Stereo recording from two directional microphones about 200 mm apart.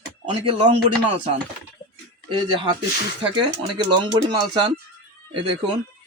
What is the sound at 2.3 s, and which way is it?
Speech, 25° right (ahead or behind).